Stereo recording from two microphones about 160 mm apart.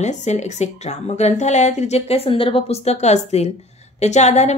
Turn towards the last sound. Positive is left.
turn(degrees=45)  # may be behind; listen again after turning